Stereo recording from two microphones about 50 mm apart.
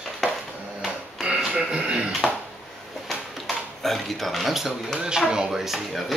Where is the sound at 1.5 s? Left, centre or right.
Centre.